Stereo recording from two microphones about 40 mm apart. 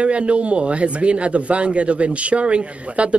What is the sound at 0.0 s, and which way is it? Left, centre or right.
Speech, right.